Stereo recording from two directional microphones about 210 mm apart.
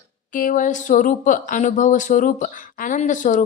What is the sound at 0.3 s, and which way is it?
Speech, 40° left (ahead or behind).